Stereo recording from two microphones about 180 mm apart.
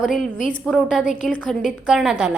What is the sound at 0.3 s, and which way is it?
Speech, 50° left (ahead or behind).